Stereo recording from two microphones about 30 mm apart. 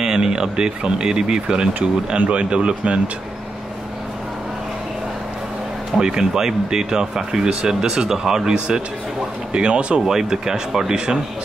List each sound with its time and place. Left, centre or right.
0.0 s speech: right
2.2 s speech: right
5.9 s speech: right
8.5 s speech: right
9.9 s speech: centre